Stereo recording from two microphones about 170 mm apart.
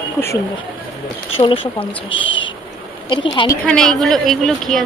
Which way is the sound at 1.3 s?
30° left (ahead or behind).